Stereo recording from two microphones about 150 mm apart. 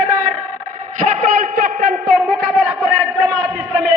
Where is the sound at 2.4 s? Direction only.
5° right (ahead or behind).